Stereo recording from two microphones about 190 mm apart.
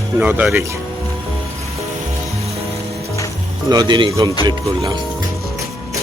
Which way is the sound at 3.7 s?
20° right (ahead or behind).